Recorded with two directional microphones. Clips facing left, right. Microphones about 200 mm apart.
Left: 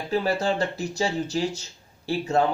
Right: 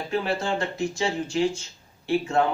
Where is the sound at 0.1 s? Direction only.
40° left (ahead or behind).